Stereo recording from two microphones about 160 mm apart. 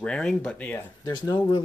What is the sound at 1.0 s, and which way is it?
Speech, 25° left (ahead or behind).